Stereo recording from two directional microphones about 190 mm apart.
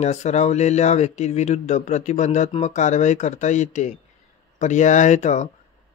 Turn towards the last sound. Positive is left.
turn(degrees=40)  # may be behind; listen again after turning